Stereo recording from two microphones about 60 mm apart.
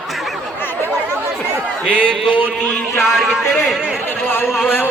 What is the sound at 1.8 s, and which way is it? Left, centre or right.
Speech, right.